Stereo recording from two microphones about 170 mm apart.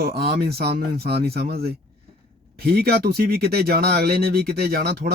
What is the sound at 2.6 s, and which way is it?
Speech, 65° right (ahead or behind).